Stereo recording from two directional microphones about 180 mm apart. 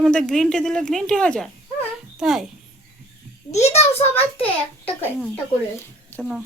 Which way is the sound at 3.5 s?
40° left (ahead or behind).